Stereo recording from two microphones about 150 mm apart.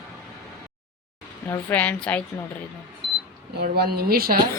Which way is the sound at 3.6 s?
90° right.